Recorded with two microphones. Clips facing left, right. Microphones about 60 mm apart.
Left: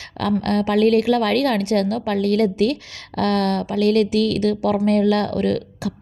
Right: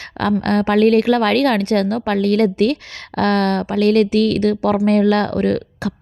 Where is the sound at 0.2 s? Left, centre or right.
Right.